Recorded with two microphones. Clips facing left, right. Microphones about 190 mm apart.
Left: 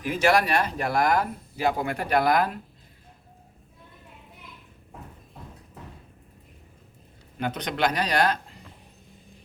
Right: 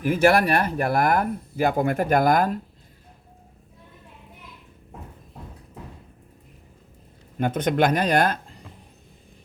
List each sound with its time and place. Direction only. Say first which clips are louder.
0.0 s speech: right 4 dB; 55° right (ahead or behind)
7.3 s speech: right 7 dB; 50° right (ahead or behind)